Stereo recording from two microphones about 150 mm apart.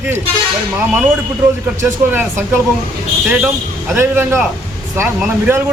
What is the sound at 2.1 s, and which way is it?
A man's voice, 15° right (ahead or behind).